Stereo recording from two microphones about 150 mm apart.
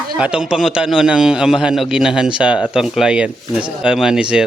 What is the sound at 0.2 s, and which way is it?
A man's voice, 5° right (ahead or behind).